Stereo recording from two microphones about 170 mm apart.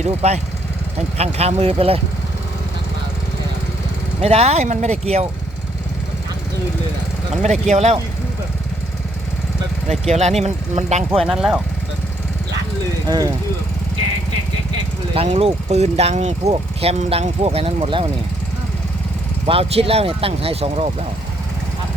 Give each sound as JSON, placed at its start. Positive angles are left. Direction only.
{"t": 0.0, "sound": "speech", "side_deg": -40}
{"t": 4.2, "sound": "speech", "side_deg": -40}
{"t": 7.7, "sound": "speech", "side_deg": -40}
{"t": 10.1, "sound": "speech", "side_deg": -40}
{"t": 11.2, "sound": "speech", "side_deg": 0}
{"t": 13.1, "sound": "speech", "side_deg": -20}
{"t": 15.1, "sound": "speech", "side_deg": -35}
{"t": 19.5, "sound": "speech", "side_deg": -35}